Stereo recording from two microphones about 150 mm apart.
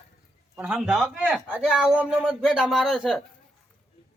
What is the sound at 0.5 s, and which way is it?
Speech, 5° right (ahead or behind).